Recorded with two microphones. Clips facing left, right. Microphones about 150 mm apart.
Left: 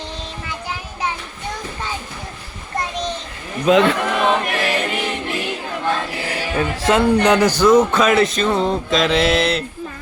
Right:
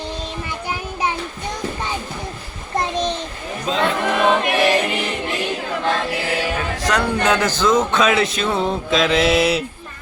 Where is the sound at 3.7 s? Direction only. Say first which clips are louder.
Left 9 dB; 75° left (ahead or behind).